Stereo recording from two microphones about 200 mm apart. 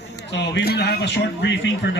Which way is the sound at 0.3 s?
60° left (ahead or behind).